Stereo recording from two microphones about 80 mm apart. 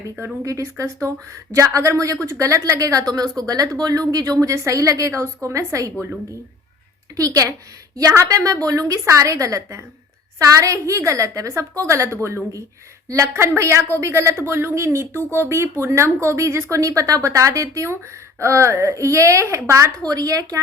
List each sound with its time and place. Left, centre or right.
0.2 s a woman's voice: right
7.2 s a woman's voice: right